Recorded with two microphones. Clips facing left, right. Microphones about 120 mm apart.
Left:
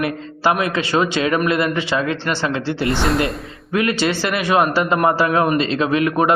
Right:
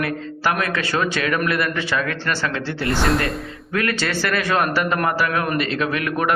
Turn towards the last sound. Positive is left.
turn(degrees=20)  # may be behind; listen again after turning